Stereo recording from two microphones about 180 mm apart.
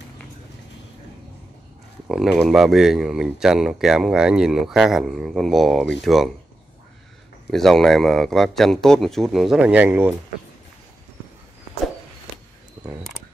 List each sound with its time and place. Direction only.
2.0 s speech: centre (ahead or behind)
7.5 s speech: centre (ahead or behind)